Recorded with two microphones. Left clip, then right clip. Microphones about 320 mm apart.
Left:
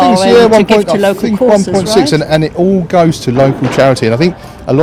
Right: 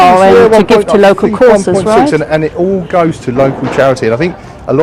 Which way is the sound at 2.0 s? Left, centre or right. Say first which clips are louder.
Right 1 dB; left.